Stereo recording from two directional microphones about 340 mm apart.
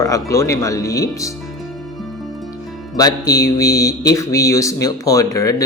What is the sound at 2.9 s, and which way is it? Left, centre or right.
Speech, centre.